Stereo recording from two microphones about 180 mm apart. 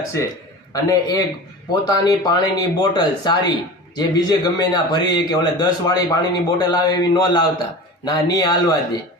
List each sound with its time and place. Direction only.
0.1 s a man's voice: 15° left (ahead or behind)